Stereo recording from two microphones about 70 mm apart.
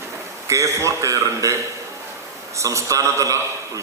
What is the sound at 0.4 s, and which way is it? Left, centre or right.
A man's voice, right.